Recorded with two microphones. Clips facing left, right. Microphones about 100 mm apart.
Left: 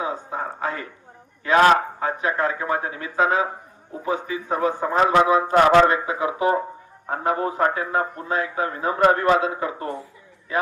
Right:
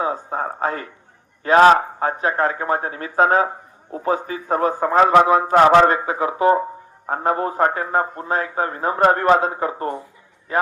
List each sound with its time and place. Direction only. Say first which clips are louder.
0.0 s a man's voice: right 4 dB; 40° right (ahead or behind)